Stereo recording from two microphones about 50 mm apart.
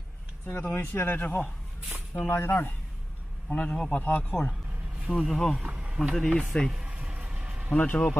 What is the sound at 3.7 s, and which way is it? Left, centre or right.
Speech, centre.